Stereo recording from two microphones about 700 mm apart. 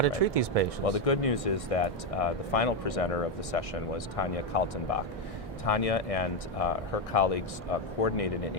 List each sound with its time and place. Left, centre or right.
0.0 s speech: right
0.9 s speech: left